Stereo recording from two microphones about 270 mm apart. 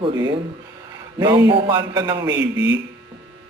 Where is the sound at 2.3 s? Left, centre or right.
Right.